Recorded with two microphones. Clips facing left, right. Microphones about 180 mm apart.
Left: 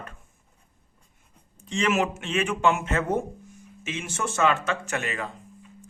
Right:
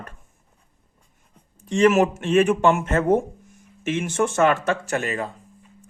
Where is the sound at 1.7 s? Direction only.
45° right (ahead or behind).